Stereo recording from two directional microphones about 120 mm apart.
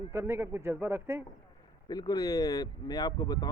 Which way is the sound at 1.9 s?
35° left (ahead or behind).